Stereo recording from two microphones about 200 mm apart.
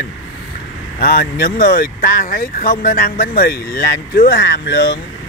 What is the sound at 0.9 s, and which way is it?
Speech, 50° left (ahead or behind).